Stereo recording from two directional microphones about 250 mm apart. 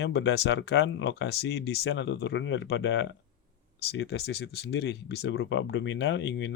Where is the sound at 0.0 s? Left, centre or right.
Left.